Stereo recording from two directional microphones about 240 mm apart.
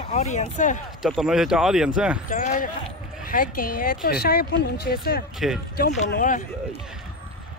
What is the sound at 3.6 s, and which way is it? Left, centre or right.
Speech, left.